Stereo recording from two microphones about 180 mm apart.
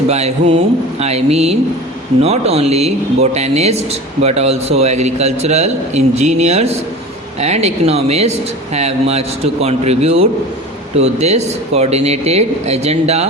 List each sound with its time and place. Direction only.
0.1 s a man's voice: 35° right (ahead or behind)